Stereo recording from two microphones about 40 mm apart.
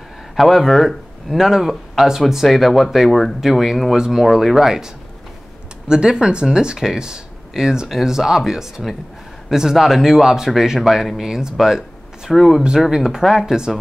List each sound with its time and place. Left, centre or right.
0.4 s speech: centre
3.4 s speech: centre
13.5 s speech: centre